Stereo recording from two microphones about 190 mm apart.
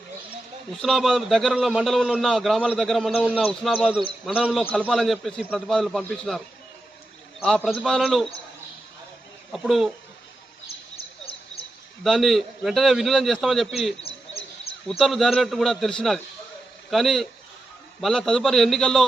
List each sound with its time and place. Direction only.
0.7 s a man's voice: centre (ahead or behind)
9.5 s a man's voice: centre (ahead or behind)
11.3 s a sound: 30° left (ahead or behind)
12.0 s a man's voice: centre (ahead or behind)
14.0 s bird: 30° left (ahead or behind)
14.7 s a man's voice: 5° left (ahead or behind)